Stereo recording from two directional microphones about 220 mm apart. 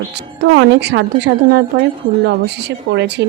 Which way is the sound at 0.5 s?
50° right (ahead or behind).